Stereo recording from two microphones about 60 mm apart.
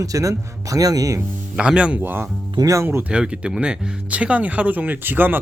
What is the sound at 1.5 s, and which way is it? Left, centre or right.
Speech, centre.